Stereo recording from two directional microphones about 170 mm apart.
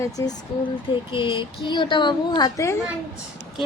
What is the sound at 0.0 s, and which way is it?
Speech, 20° left (ahead or behind).